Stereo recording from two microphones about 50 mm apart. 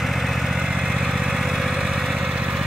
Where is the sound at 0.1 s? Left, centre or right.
Centre.